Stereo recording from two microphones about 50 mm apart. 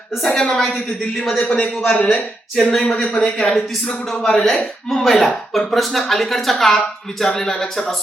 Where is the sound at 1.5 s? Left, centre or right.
Left.